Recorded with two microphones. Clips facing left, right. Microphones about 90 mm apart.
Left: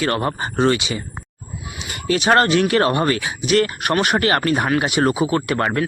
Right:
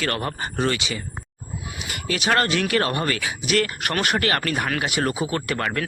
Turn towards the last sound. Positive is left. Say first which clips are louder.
# left 6 dB
turn(degrees=30)  # may be behind; listen again after turning